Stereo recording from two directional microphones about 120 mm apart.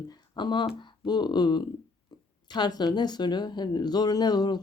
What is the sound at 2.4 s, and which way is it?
A woman's voice, 40° left (ahead or behind).